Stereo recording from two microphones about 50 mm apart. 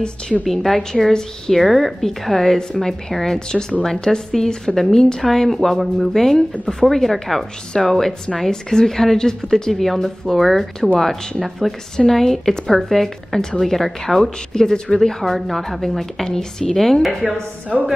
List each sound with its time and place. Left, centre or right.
0.0 s a woman's voice: centre
0.5 s a woman's voice: centre